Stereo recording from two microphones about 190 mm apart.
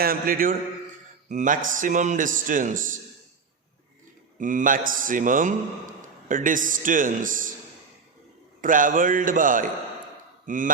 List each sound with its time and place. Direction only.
0.0 s a man's voice: 50° right (ahead or behind)
4.4 s a man's voice: 45° right (ahead or behind)
8.6 s a man's voice: 45° right (ahead or behind)